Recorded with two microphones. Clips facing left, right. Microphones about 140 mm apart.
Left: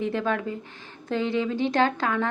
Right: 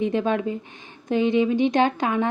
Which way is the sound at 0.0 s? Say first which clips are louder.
Right 4 dB; 20° right (ahead or behind).